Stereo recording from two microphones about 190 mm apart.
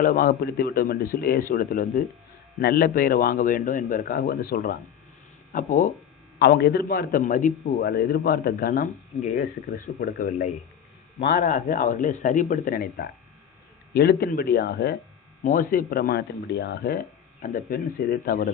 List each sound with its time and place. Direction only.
0.0 s a man's voice: 45° left (ahead or behind)
6.4 s a man's voice: 60° left (ahead or behind)
15.4 s a man's voice: 45° left (ahead or behind)
17.4 s a man's voice: 45° left (ahead or behind)